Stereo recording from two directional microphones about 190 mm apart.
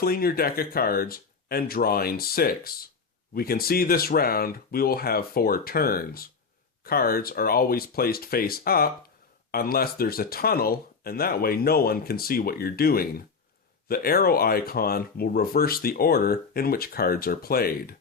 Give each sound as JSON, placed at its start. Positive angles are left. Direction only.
{"t": 0.0, "sound": "speech", "side_deg": 50}